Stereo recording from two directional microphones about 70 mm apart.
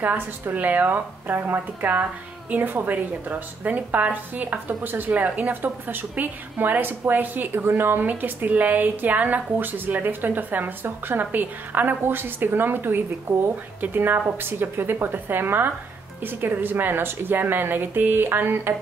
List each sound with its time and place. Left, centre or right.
0.0 s speech: right